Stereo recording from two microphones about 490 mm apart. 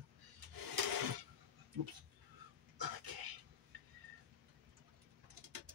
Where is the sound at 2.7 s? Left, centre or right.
Right.